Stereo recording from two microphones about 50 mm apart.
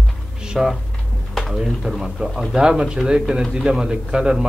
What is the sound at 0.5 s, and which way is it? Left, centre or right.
A man's voice, centre.